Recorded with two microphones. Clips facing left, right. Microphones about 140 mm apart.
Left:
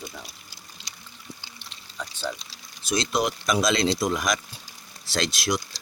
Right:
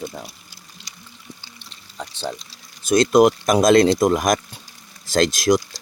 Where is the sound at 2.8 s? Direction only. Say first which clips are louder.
Right 11 dB; 50° right (ahead or behind).